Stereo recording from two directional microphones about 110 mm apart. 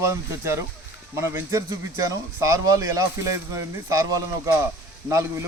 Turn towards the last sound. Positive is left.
turn(degrees=-25)  # may be behind; listen again after turning